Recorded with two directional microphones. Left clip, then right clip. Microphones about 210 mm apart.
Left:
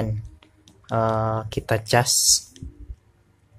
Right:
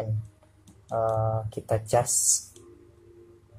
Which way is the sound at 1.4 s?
25° left (ahead or behind).